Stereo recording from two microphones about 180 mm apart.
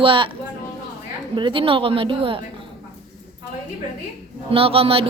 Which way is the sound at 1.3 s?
25° right (ahead or behind).